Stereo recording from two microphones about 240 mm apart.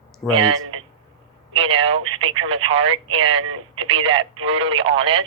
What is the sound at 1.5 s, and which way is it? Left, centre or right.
Speech, right.